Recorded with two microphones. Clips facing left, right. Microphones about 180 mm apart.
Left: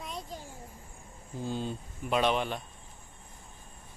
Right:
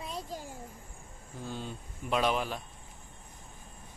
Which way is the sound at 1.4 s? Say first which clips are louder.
Left 5 dB; 30° left (ahead or behind).